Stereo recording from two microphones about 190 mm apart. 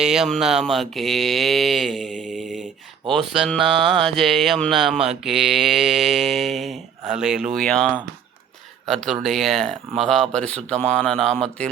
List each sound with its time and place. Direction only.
0.0 s speech: 5° right (ahead or behind)
2.1 s mantra: 40° right (ahead or behind)
3.1 s speech: centre (ahead or behind)